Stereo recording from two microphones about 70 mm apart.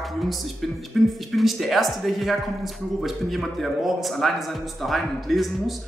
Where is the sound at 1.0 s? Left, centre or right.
Centre.